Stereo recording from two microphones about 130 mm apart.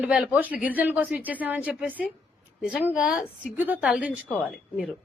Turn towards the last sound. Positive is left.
turn(degrees=-5)  # may be behind; listen again after turning